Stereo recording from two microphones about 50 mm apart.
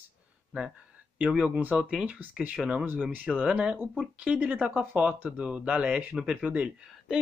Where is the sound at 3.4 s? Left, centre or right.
Centre.